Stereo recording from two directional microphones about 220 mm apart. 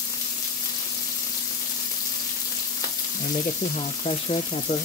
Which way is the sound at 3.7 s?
25° left (ahead or behind).